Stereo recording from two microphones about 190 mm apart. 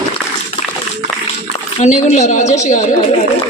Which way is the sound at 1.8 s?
40° left (ahead or behind).